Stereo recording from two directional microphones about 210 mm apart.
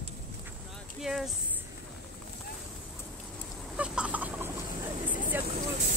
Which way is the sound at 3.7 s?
5° right (ahead or behind).